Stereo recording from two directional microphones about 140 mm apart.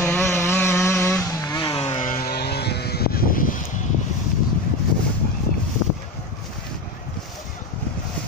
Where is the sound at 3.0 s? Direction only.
90° left; by 3.8 s 70° left (ahead or behind).